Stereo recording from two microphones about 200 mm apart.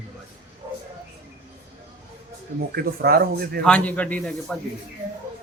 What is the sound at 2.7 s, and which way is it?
Speech, 50° right (ahead or behind).